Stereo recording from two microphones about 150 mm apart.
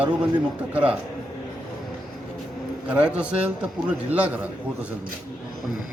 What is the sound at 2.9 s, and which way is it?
A man's voice, 10° right (ahead or behind).